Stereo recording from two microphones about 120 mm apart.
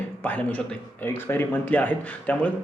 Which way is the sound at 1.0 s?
20° left (ahead or behind).